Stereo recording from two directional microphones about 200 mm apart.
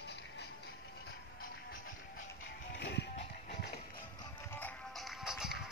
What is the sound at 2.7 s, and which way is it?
Music, 60° left (ahead or behind).